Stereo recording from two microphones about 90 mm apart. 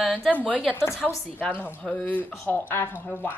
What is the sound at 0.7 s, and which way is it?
Speech, 30° left (ahead or behind).